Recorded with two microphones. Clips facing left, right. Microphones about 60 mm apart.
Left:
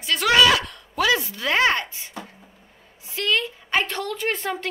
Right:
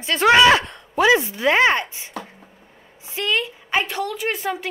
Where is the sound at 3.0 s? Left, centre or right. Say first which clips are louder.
Right 1 dB; right.